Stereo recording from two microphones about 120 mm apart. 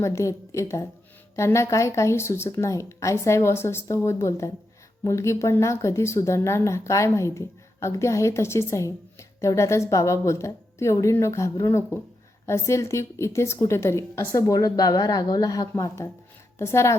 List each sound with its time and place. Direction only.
0.0 s speech: 25° left (ahead or behind)